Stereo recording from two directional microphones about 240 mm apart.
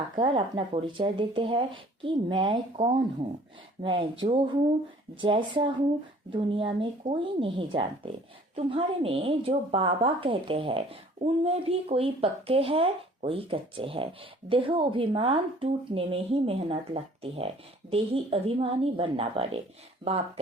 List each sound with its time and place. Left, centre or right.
0.2 s a woman's voice: right